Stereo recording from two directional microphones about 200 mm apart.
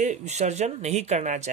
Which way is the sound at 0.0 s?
35° right (ahead or behind).